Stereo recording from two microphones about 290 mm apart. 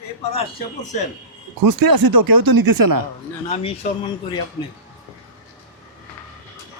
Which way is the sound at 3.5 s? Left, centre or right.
Centre.